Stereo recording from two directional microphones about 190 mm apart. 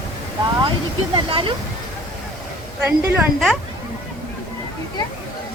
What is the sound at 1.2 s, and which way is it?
Speech, 30° right (ahead or behind).